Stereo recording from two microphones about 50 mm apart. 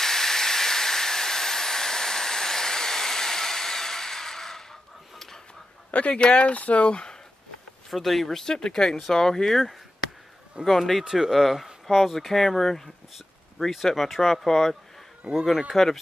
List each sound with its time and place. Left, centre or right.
0.0 s a sound: centre
5.9 s speech: left
7.9 s speech: centre
15.7 s speech: centre